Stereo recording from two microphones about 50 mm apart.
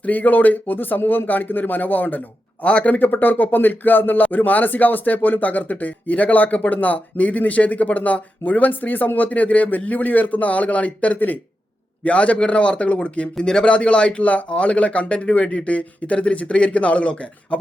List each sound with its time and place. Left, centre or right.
0.0 s a man's voice: left
13.3 s speech: centre